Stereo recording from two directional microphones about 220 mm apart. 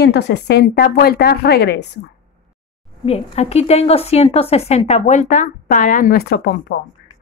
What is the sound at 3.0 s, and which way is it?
A woman's voice, 25° left (ahead or behind).